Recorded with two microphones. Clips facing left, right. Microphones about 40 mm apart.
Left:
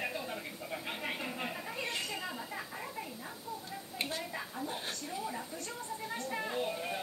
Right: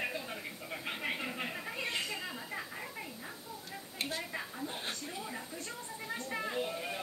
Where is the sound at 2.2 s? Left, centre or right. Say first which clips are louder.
Left 1 dB; centre.